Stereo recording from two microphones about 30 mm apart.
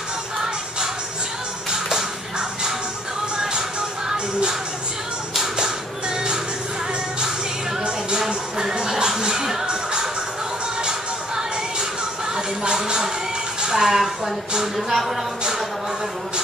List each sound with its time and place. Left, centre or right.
8.3 s music: right
10.8 s music: right
13.7 s a sound: centre
14.8 s a woman's voice: centre